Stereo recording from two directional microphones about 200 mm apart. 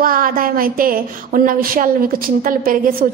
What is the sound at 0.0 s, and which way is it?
A woman's voice, 45° right (ahead or behind).